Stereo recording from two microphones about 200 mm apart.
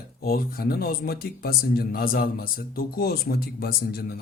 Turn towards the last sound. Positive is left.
turn(degrees=45)  # may be behind; listen again after turning